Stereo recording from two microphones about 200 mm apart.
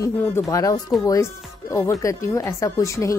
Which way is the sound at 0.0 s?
15° left (ahead or behind).